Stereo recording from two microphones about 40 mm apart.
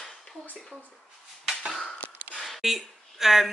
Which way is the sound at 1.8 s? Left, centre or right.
Left.